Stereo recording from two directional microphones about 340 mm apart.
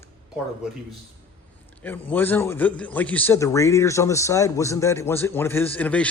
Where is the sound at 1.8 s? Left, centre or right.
Centre.